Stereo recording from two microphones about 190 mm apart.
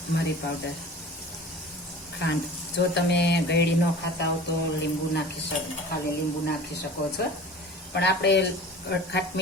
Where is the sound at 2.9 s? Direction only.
65° left (ahead or behind).